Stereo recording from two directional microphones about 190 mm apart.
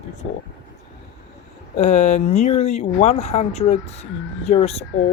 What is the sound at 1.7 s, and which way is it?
Speech, 35° left (ahead or behind).